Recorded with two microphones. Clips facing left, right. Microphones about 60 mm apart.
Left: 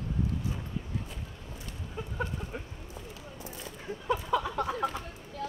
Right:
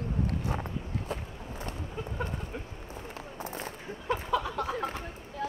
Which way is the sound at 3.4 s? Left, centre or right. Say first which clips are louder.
Right 5 dB; right.